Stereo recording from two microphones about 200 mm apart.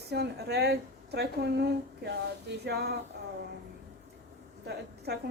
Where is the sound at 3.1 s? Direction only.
55° right (ahead or behind).